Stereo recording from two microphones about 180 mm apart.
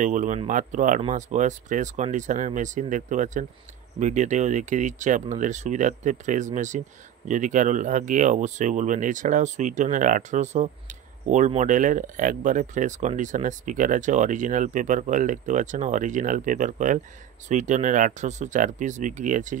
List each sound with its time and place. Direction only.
0.0 s speech: 45° right (ahead or behind)